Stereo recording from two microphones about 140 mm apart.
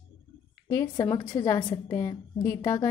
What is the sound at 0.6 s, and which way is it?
Speech, 20° left (ahead or behind).